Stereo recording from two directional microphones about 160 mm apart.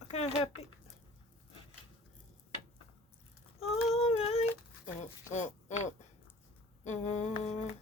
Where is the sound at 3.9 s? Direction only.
40° left (ahead or behind).